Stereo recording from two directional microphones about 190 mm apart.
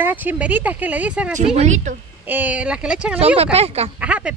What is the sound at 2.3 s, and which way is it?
Speech, 10° right (ahead or behind).